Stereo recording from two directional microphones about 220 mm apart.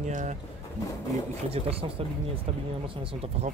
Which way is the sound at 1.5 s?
25° right (ahead or behind).